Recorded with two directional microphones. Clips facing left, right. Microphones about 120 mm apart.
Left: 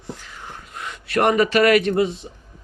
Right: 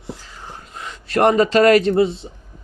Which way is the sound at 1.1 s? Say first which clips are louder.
Right 3 dB; 30° right (ahead or behind).